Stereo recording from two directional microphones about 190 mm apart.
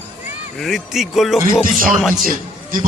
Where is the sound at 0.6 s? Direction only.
Centre (ahead or behind).